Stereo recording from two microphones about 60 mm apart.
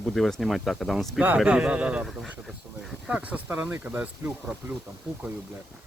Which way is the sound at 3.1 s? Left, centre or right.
Right.